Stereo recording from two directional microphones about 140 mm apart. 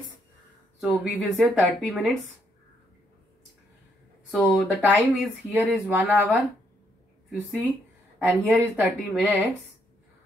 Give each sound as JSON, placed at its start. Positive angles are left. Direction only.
{"t": 0.7, "sound": "speech", "side_deg": 0}
{"t": 4.3, "sound": "speech", "side_deg": 0}
{"t": 4.6, "sound": "speech", "side_deg": -10}
{"t": 8.3, "sound": "speech", "side_deg": -10}